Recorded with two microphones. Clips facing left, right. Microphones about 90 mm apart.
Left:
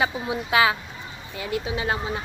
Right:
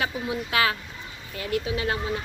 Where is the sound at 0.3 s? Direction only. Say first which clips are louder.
Left 4 dB; 20° left (ahead or behind).